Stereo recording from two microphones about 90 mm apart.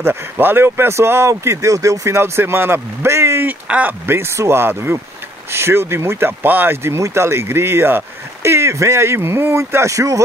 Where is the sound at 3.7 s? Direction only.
20° right (ahead or behind).